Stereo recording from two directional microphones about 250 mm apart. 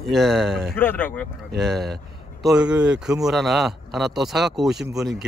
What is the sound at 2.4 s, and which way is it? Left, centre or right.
Speech, centre.